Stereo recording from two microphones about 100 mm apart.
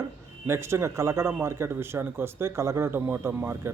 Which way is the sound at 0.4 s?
25° right (ahead or behind).